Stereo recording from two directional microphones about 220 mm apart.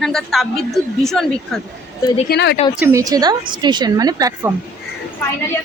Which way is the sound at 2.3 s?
50° left (ahead or behind).